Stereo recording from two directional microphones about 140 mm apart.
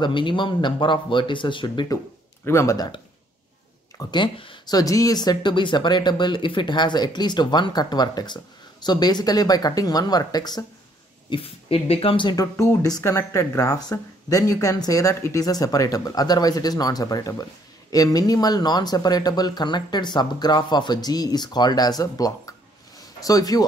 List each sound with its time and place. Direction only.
0.0 s speech: 35° left (ahead or behind)
2.4 s speech: 20° left (ahead or behind)
4.0 s speech: 35° left (ahead or behind)
11.2 s speech: 40° left (ahead or behind); by 22.3 s 25° left (ahead or behind)
22.9 s a sound: 25° left (ahead or behind)